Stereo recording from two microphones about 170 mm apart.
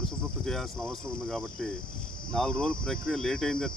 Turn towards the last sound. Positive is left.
turn(degrees=5)  # may be behind; listen again after turning